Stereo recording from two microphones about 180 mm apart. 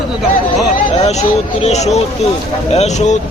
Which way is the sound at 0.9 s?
35° left (ahead or behind).